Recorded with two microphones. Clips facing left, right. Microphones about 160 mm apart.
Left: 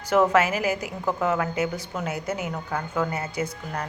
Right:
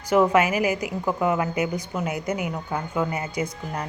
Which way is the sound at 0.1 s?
10° right (ahead or behind).